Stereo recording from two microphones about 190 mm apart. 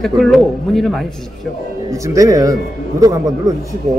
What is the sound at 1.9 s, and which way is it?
Speech, 15° right (ahead or behind).